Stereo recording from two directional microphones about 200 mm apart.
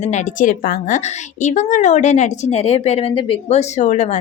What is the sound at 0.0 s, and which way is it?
Speech, 35° left (ahead or behind).